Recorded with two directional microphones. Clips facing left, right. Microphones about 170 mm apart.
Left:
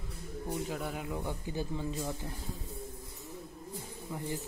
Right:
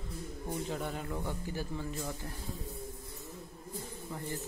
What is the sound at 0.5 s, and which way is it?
A man's voice, 5° left (ahead or behind).